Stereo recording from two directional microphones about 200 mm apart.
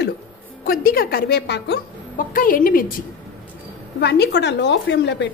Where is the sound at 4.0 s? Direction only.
55° left (ahead or behind).